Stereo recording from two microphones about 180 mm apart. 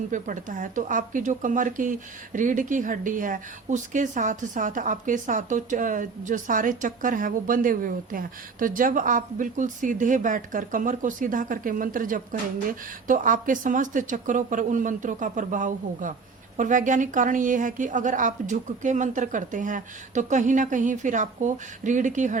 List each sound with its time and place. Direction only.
0.1 s speech: 45° right (ahead or behind)